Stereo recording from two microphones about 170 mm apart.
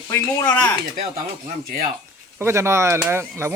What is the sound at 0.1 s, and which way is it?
Speech, 10° left (ahead or behind).